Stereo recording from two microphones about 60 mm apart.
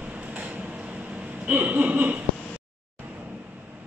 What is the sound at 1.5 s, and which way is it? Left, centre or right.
Speech, right.